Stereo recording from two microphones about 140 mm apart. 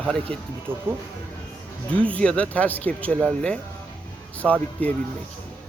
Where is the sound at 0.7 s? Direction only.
15° right (ahead or behind).